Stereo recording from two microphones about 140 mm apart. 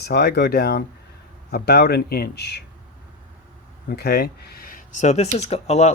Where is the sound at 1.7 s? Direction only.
90° left.